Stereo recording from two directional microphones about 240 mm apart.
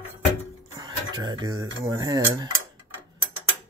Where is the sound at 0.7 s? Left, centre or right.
Centre.